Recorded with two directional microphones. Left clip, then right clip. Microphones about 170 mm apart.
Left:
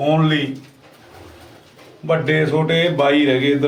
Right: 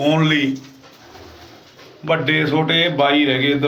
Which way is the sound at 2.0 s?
15° left (ahead or behind).